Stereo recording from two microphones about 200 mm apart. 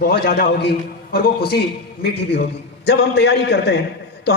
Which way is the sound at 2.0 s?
55° left (ahead or behind).